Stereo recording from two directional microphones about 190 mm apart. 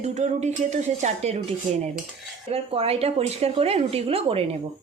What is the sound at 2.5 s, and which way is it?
A man's voice, 30° right (ahead or behind).